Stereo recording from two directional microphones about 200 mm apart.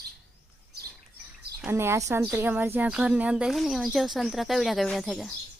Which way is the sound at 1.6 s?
10° right (ahead or behind).